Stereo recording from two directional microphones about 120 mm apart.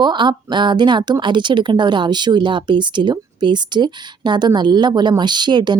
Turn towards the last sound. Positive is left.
turn(degrees=-40)  # may be behind; listen again after turning